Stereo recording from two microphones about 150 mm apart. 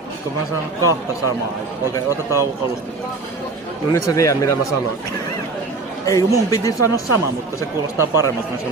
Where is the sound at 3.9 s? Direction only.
20° left (ahead or behind).